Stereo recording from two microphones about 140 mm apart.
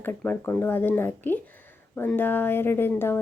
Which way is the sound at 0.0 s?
15° left (ahead or behind).